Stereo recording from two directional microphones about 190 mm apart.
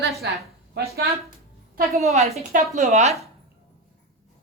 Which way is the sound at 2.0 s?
35° right (ahead or behind).